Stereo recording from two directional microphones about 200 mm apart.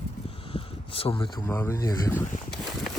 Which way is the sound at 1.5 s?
15° left (ahead or behind).